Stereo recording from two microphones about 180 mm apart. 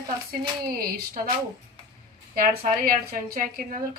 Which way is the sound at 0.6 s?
55° right (ahead or behind).